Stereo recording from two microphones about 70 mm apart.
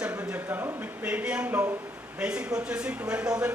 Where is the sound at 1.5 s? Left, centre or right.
Right.